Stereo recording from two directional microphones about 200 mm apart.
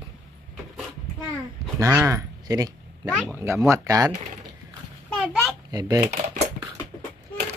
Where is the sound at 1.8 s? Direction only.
15° right (ahead or behind).